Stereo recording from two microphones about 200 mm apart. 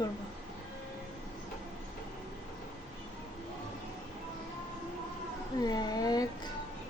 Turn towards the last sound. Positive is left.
turn(degrees=20)  # may be behind; listen again after turning